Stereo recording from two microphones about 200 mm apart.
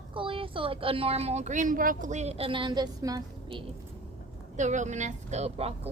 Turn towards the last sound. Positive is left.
turn(degrees=-30)  # may be behind; listen again after turning